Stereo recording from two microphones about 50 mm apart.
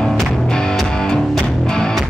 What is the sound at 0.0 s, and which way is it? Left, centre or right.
Music, centre.